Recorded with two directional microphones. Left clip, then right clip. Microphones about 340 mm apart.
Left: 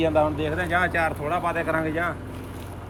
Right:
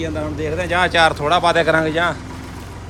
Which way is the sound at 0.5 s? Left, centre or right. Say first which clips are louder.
Right 10 dB; centre.